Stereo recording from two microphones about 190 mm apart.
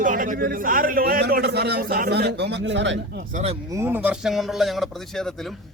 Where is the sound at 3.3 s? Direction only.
35° right (ahead or behind).